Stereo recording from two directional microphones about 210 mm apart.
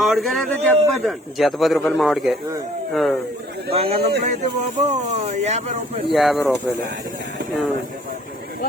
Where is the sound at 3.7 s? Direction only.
30° right (ahead or behind).